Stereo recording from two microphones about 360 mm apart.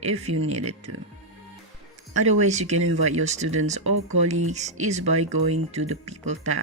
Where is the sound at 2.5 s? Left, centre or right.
Centre.